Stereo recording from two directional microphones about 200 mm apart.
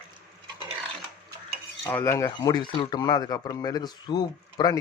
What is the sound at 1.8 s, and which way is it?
Speech, 15° left (ahead or behind).